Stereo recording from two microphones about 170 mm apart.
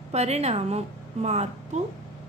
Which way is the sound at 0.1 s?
40° right (ahead or behind).